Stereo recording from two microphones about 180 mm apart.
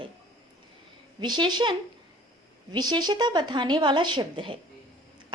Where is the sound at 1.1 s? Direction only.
25° right (ahead or behind).